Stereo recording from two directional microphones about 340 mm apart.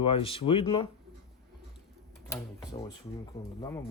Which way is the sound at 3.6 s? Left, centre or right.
Centre.